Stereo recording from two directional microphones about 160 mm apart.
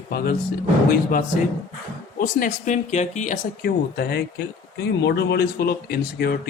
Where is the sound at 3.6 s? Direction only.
85° left.